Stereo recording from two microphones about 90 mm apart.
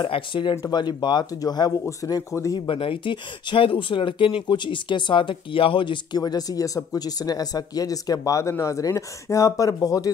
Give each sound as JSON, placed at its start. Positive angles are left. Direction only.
{"t": 0.0, "sound": "speech", "side_deg": 65}
{"t": 0.7, "sound": "speech", "side_deg": 55}
{"t": 2.6, "sound": "speech", "side_deg": 80}